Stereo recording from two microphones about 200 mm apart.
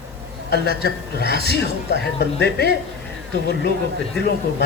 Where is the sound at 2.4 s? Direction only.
55° left (ahead or behind).